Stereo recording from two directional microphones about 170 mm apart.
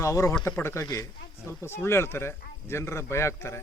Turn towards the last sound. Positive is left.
turn(degrees=15)  # may be behind; listen again after turning